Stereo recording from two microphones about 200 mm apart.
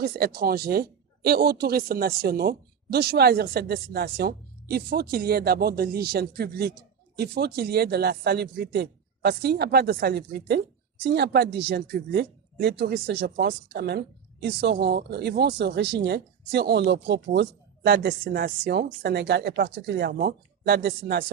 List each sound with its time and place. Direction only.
0.0 s speech: 50° right (ahead or behind)